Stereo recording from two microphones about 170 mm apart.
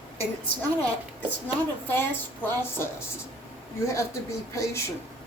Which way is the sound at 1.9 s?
15° left (ahead or behind).